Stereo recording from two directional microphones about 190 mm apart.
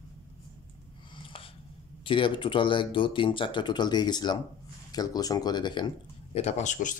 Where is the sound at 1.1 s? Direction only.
30° left (ahead or behind).